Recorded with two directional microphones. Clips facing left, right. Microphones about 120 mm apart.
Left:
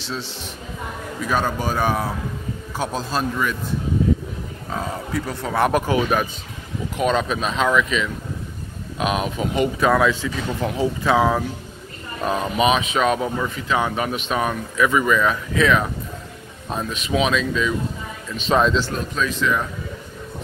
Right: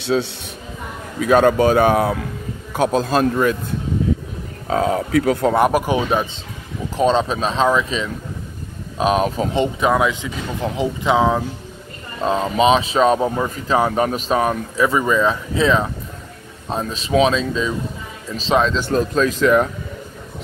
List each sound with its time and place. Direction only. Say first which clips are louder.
1.2 s speech: right 10 dB; 65° right (ahead or behind); by 3.5 s 50° right (ahead or behind)
4.6 s speech: right 9 dB; 75° right (ahead or behind)
5.6 s speech: right 3 dB; 5° right (ahead or behind)
5.9 s speech: right 1 dB; 25° right (ahead or behind)
18.9 s speech: right 7 dB; 40° right (ahead or behind); by 19.7 s 55° right (ahead or behind)